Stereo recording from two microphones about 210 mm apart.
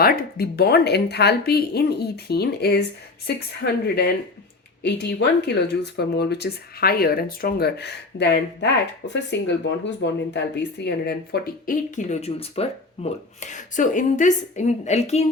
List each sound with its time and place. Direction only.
0.0 s speech: 45° left (ahead or behind)